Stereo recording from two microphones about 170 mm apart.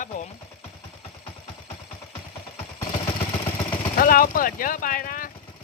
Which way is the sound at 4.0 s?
55° left (ahead or behind).